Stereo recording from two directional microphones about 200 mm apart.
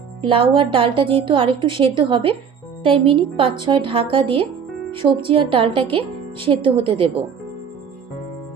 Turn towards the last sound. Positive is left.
turn(degrees=-25)  # may be behind; listen again after turning